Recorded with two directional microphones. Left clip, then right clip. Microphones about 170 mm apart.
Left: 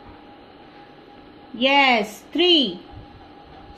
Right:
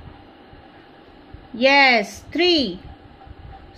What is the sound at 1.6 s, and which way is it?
A woman's voice, 45° right (ahead or behind).